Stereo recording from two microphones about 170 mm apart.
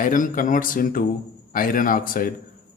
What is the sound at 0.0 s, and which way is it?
Speech, 50° left (ahead or behind).